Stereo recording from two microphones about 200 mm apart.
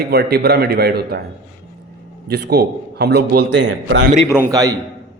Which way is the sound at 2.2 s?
55° right (ahead or behind).